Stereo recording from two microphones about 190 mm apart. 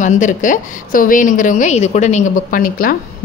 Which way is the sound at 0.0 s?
40° left (ahead or behind).